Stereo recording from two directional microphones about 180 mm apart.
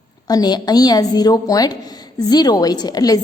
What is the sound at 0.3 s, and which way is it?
A woman's voice, 20° left (ahead or behind).